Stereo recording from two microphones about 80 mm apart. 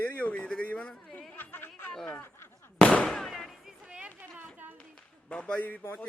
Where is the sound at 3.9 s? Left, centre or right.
Centre.